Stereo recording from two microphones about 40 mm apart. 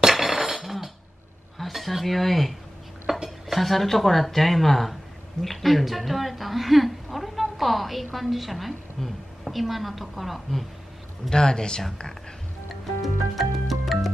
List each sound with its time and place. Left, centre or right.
0.1 s a sound: centre
1.6 s speech: centre
3.1 s a sound: centre
3.4 s a woman's voice: centre
11.2 s speech: centre
13.4 s music: centre